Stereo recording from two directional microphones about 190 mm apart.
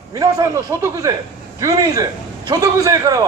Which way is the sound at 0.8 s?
15° right (ahead or behind).